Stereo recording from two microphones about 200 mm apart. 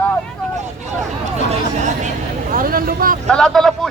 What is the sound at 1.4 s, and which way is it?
Speech, 35° right (ahead or behind).